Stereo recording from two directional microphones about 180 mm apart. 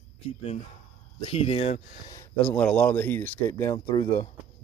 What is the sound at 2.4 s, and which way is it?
Speech, 5° left (ahead or behind).